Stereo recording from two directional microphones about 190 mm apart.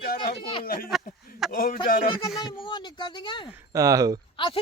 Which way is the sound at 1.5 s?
50° left (ahead or behind).